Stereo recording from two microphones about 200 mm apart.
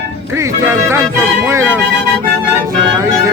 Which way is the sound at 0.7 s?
10° right (ahead or behind).